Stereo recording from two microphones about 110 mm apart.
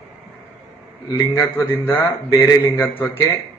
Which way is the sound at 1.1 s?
25° left (ahead or behind).